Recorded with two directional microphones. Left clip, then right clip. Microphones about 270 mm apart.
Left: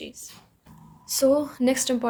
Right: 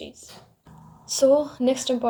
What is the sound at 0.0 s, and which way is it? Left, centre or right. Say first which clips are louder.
Speech: even; left.